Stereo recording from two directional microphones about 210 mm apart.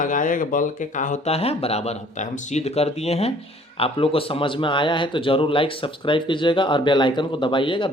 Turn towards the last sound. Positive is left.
turn(degrees=25)  # may be behind; listen again after turning